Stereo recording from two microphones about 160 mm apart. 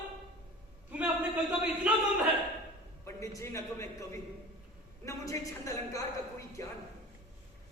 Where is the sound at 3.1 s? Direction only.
20° left (ahead or behind).